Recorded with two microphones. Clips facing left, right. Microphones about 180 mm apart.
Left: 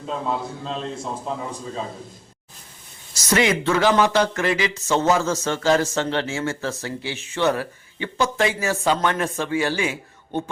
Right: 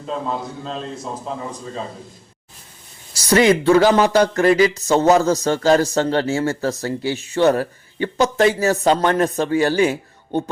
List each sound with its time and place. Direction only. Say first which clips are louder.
0.3 s a man's voice: right 1 dB; centre (ahead or behind)
3.2 s speech: right 6 dB; 35° right (ahead or behind)